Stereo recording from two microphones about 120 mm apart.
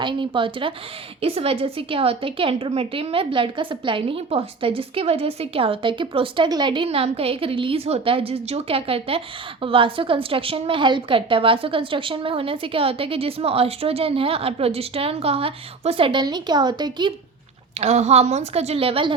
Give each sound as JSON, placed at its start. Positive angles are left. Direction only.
{"t": 0.0, "sound": "a woman's voice", "side_deg": -40}
{"t": 1.2, "sound": "a woman's voice", "side_deg": -55}
{"t": 16.2, "sound": "speech", "side_deg": -35}
{"t": 17.7, "sound": "a woman's voice", "side_deg": -65}